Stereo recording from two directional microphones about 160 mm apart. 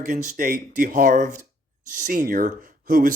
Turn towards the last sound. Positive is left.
turn(degrees=-60)  # may be behind; listen again after turning